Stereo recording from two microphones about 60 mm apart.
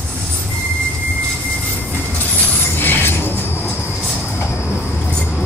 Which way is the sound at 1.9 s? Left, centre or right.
Left.